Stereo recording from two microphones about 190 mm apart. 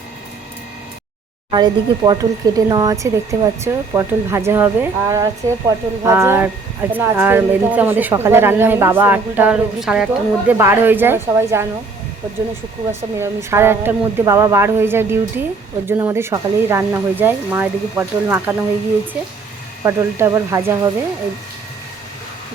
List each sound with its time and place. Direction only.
1.5 s speech: 25° right (ahead or behind)
12.9 s speech: 15° right (ahead or behind)
19.8 s speech: 15° right (ahead or behind)